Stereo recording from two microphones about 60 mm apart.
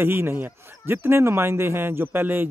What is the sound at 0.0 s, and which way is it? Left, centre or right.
Speech, right.